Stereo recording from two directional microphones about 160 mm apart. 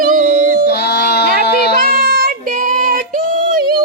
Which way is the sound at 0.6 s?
90° left.